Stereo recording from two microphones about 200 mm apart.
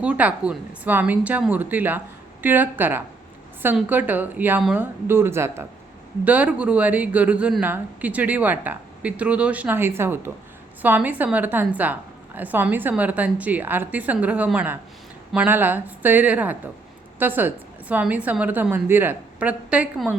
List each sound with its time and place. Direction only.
0.0 s speech: 5° right (ahead or behind)